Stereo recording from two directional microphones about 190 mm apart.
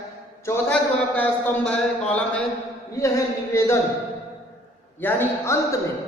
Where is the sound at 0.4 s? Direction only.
10° left (ahead or behind).